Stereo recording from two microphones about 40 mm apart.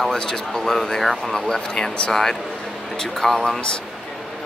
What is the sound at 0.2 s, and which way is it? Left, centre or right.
Speech, centre.